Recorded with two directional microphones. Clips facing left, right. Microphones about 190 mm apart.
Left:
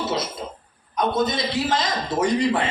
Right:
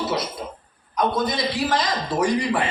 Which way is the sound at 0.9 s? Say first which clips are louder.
Even; 20° left (ahead or behind).